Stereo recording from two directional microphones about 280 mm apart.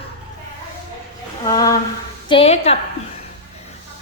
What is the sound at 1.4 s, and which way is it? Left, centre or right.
A woman's voice, centre.